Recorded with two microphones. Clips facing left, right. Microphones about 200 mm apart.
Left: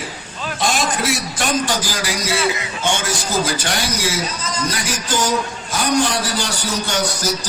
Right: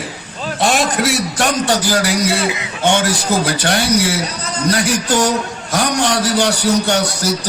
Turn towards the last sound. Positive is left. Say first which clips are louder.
# right 4 dB
turn(degrees=-65)  # may be behind; listen again after turning